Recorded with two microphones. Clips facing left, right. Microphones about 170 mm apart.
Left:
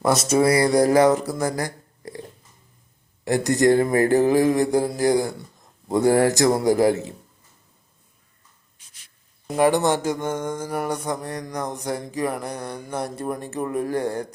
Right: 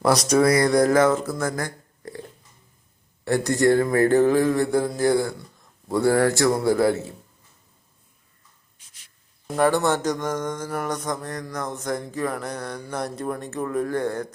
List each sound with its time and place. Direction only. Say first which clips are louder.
0.0 s a sound: even; 5° left (ahead or behind)
0.5 s music: left 1 dB; 10° left (ahead or behind)
1.5 s a sound: left 2 dB; 15° left (ahead or behind)
3.2 s music: left 1 dB; 20° left (ahead or behind)
5.9 s a man's voice: left 2 dB; 20° left (ahead or behind)
9.5 s music: left 1 dB; 15° left (ahead or behind)